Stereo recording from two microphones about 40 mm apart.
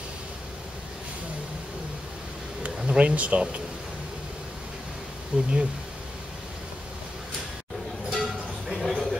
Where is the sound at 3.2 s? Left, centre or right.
Right.